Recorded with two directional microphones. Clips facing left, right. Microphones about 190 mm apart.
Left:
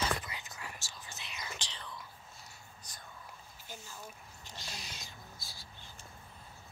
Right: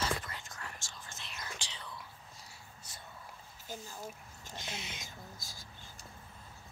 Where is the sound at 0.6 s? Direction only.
5° left (ahead or behind).